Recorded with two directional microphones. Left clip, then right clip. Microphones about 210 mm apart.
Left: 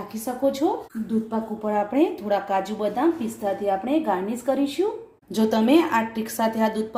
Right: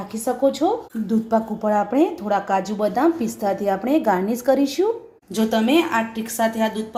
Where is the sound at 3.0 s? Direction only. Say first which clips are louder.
Right 3 dB; 40° right (ahead or behind).